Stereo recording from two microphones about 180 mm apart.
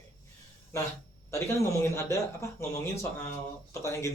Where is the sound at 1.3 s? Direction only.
15° left (ahead or behind).